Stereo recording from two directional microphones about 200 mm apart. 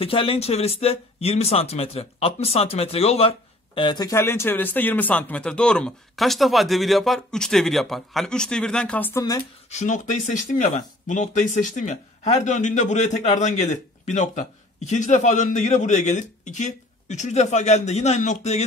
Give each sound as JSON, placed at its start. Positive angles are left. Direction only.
{"t": 0.0, "sound": "speech", "side_deg": 25}
{"t": 9.7, "sound": "speech", "side_deg": 35}